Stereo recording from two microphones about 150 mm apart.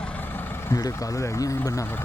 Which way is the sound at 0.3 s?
20° left (ahead or behind).